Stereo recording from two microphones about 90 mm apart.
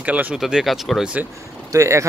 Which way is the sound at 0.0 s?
15° right (ahead or behind).